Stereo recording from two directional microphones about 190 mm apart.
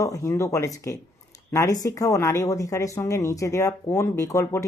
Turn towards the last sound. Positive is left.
turn(degrees=15)  # may be behind; listen again after turning